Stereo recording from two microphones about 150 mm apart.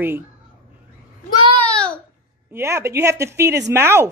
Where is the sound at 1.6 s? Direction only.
5° left (ahead or behind).